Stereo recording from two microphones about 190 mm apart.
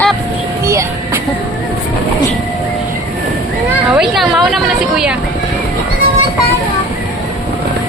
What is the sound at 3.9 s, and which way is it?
Speech, centre (ahead or behind).